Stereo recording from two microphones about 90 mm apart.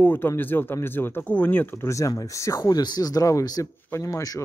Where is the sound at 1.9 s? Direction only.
40° left (ahead or behind).